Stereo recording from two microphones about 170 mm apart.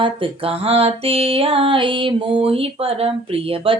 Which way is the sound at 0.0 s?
30° right (ahead or behind).